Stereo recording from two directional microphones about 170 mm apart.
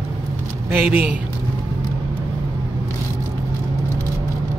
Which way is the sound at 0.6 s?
10° right (ahead or behind).